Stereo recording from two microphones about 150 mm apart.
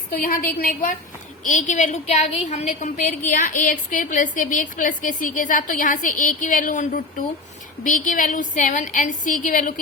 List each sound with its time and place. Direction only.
0.1 s a woman's voice: 70° left (ahead or behind)
1.5 s a woman's voice: 55° left (ahead or behind)